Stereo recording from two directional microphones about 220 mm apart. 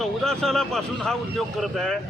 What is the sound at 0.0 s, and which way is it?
Speech, centre (ahead or behind).